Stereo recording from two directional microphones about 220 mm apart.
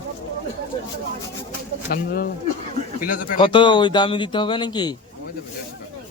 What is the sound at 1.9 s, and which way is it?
A man's voice, 45° left (ahead or behind).